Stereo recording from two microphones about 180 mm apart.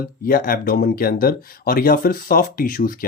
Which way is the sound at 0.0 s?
55° left (ahead or behind).